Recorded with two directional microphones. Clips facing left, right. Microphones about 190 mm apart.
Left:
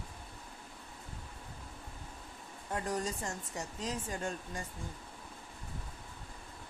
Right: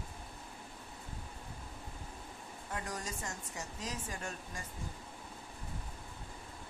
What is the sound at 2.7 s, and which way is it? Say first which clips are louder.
Speech: left 6 dB; 30° left (ahead or behind).